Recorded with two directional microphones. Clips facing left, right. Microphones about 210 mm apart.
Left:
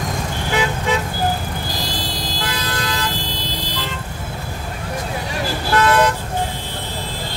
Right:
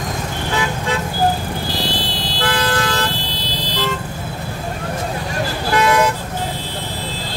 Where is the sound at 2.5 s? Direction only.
50° right (ahead or behind).